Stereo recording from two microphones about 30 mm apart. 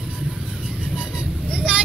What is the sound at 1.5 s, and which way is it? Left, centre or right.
Vehicle, right.